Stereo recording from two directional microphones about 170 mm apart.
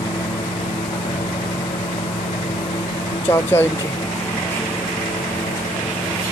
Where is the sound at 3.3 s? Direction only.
15° left (ahead or behind).